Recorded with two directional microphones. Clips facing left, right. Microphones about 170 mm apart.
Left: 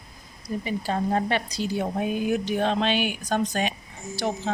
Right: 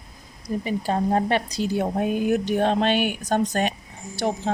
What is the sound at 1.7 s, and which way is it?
Speech, 50° right (ahead or behind).